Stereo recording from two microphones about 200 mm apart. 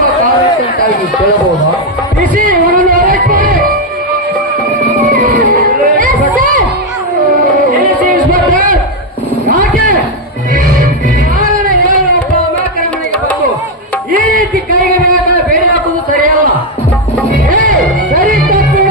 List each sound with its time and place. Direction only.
2.3 s music: 45° right (ahead or behind)